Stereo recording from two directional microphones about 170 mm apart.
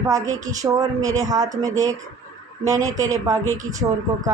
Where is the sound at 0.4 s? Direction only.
20° right (ahead or behind).